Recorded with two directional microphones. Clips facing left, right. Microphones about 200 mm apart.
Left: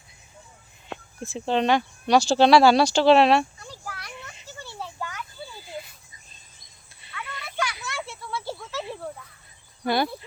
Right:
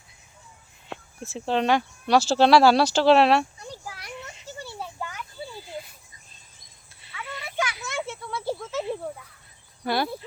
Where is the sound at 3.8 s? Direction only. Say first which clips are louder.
Right 1 dB; 20° right (ahead or behind).